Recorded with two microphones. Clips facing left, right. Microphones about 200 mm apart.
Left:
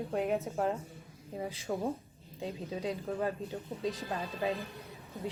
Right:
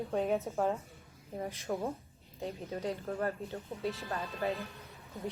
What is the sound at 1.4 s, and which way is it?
Speech, 10° left (ahead or behind).